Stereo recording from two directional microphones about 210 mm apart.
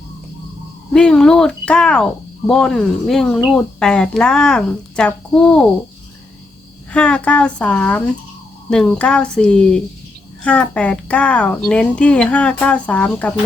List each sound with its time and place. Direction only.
0.9 s speech: 5° left (ahead or behind)
6.9 s speech: 5° left (ahead or behind)